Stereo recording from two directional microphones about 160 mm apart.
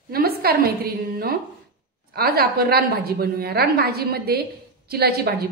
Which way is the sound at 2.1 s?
75° right (ahead or behind).